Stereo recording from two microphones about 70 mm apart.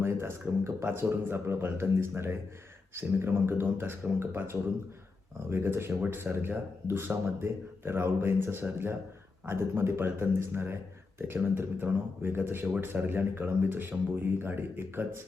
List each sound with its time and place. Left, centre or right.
0.0 s speech: right